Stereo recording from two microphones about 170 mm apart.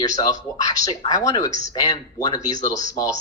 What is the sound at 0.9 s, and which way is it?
A man's voice, 20° left (ahead or behind).